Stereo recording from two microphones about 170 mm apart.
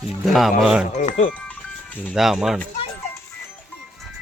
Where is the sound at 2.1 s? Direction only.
Centre (ahead or behind).